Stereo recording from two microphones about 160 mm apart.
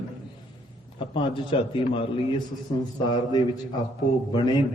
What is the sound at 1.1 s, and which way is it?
A man's voice, 30° left (ahead or behind).